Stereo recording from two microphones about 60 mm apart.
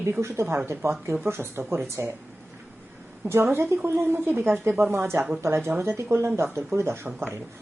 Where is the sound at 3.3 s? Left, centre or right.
Right.